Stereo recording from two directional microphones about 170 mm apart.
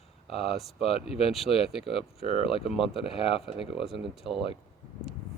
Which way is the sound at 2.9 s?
35° left (ahead or behind).